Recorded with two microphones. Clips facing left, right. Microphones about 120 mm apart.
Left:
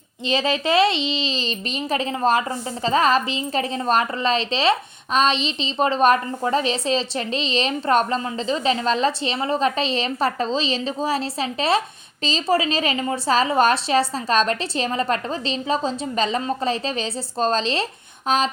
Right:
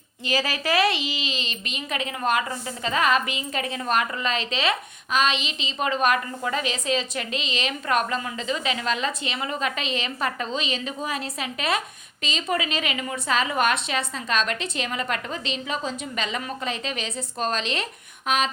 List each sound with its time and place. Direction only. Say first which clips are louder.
0.3 s a child's voice: left 4 dB; 25° left (ahead or behind)